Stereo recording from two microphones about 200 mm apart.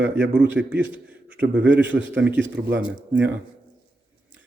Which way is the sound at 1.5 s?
60° right (ahead or behind).